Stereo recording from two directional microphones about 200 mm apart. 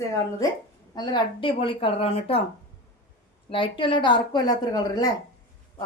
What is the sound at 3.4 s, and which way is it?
A woman's voice, 25° left (ahead or behind).